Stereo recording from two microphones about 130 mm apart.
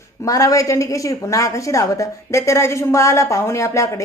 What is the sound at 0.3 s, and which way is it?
A woman's voice, 25° left (ahead or behind).